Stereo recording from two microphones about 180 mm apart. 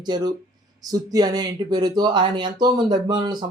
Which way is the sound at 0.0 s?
25° right (ahead or behind).